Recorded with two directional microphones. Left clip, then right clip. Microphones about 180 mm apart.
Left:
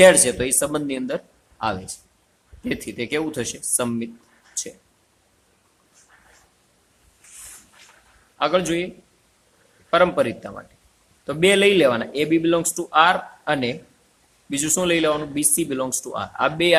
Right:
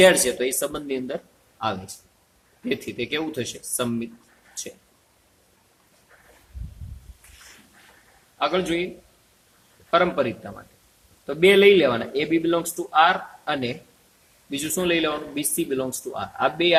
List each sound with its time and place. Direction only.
0.0 s speech: 40° left (ahead or behind)
8.4 s speech: 45° left (ahead or behind)
9.9 s speech: 45° left (ahead or behind)